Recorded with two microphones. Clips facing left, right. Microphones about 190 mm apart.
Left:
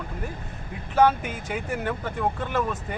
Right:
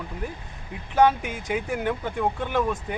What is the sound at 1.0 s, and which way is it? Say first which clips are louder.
Speech: even; centre (ahead or behind).